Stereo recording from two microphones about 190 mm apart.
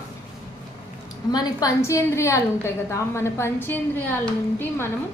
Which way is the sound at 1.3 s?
20° left (ahead or behind).